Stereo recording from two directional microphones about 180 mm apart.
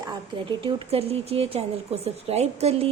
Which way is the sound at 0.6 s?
35° right (ahead or behind).